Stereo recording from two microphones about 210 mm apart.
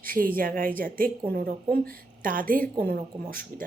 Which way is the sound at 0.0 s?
40° right (ahead or behind).